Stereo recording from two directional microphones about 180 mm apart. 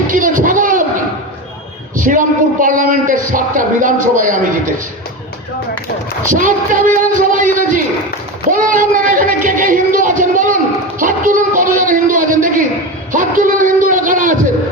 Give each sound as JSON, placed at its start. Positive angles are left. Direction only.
{"t": 0.1, "sound": "a sound", "side_deg": -50}
{"t": 2.0, "sound": "speech", "side_deg": -45}
{"t": 6.3, "sound": "speech", "side_deg": -45}